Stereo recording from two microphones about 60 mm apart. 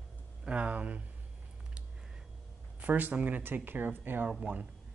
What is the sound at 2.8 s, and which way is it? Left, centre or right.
Speech, right.